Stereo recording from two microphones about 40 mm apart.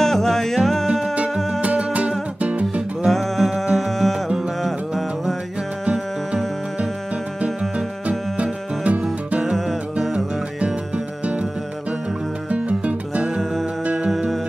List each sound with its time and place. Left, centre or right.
0.0 s music: centre
1.6 s music: right
3.1 s music: centre
5.9 s music: right
8.4 s music: right
12.4 s music: right